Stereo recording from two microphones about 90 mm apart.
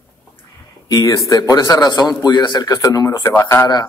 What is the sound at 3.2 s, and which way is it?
Speech, 25° left (ahead or behind).